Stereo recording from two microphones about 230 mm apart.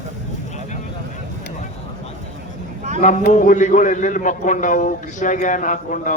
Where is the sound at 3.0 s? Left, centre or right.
Left.